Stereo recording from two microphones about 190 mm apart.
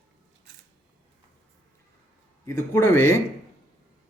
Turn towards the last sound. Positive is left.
turn(degrees=15)  # may be behind; listen again after turning